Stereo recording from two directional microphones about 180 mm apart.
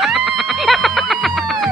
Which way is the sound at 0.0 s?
Centre (ahead or behind).